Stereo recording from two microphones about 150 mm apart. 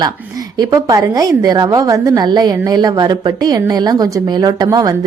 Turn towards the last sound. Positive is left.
turn(degrees=-25)  # may be behind; listen again after turning